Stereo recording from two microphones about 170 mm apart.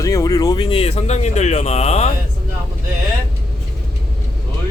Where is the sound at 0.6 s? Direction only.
35° left (ahead or behind).